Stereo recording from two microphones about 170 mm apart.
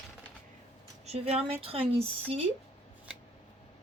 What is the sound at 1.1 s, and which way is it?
Speech, 40° right (ahead or behind).